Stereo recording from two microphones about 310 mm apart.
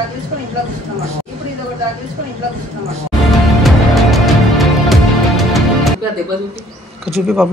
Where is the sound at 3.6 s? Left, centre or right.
Centre.